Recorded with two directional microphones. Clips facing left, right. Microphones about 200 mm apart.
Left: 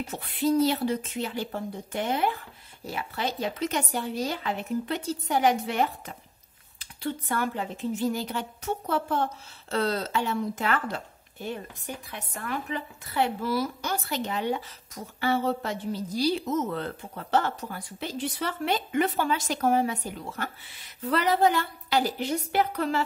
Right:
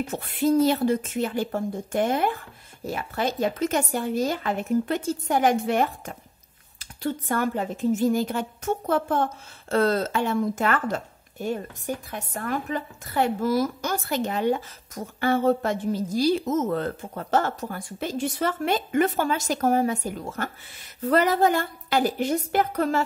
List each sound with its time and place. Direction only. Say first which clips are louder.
0.1 s speech: right 2 dB; 50° right (ahead or behind)